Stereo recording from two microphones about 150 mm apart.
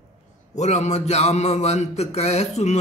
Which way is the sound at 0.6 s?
50° left (ahead or behind).